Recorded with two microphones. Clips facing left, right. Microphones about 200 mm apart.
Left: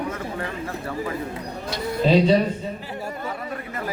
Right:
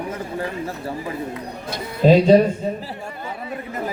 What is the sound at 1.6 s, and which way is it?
Speech, 45° right (ahead or behind).